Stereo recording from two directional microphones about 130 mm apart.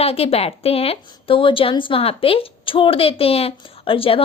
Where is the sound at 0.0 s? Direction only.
50° left (ahead or behind).